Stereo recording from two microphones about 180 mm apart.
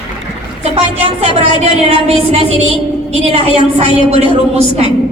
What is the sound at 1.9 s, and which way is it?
A woman's voice, 35° right (ahead or behind).